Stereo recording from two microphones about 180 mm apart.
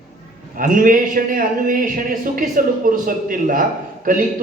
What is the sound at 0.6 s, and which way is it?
A man's voice, 50° right (ahead or behind).